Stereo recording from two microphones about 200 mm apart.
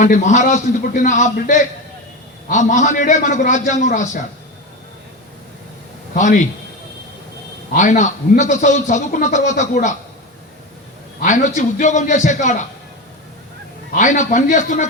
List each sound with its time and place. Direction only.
0.0 s a man's voice: 35° left (ahead or behind)
6.1 s a man's voice: 40° left (ahead or behind)
7.7 s a man's voice: 40° left (ahead or behind)
11.2 s a man's voice: 40° left (ahead or behind)
13.9 s a man's voice: 40° left (ahead or behind)